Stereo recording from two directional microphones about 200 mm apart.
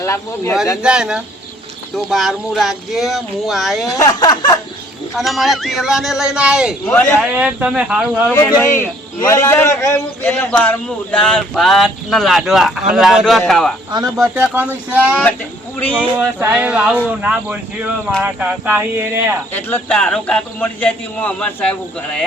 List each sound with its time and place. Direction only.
0.0 s a man's voice: 15° left (ahead or behind)
0.8 s a man's voice: 5° right (ahead or behind)
3.8 s speech: 15° left (ahead or behind)
5.1 s a man's voice: centre (ahead or behind)
6.9 s a man's voice: 10° left (ahead or behind)
7.2 s a man's voice: 5° right (ahead or behind)
8.4 s a man's voice: 15° left (ahead or behind)
13.9 s speech: 15° right (ahead or behind)
19.5 s a man's voice: 10° left (ahead or behind)